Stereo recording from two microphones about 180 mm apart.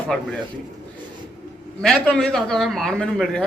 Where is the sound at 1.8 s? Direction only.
Centre (ahead or behind).